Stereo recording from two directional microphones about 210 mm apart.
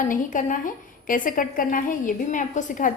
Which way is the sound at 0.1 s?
40° left (ahead or behind).